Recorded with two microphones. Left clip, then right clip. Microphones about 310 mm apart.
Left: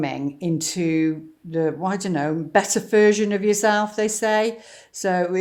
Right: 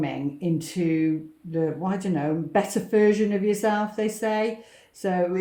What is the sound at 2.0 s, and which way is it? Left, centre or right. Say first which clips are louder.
Speech: left 3 dB; left.